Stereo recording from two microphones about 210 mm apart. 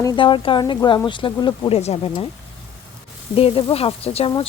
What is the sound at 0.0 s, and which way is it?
Speech, 20° left (ahead or behind).